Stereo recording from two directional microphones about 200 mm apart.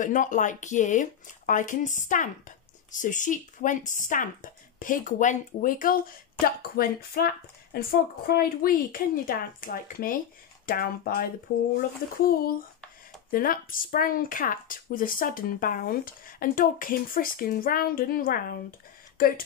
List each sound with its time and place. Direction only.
0.0 s speech: 40° left (ahead or behind)
13.3 s speech: 45° left (ahead or behind)